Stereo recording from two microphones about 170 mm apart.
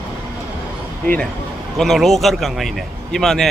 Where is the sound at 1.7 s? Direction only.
Centre (ahead or behind).